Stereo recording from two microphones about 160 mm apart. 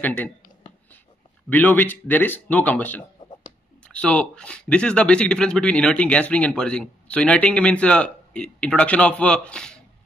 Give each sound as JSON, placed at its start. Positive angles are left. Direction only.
{"t": 0.0, "sound": "speech", "side_deg": 10}
{"t": 1.5, "sound": "speech", "side_deg": 10}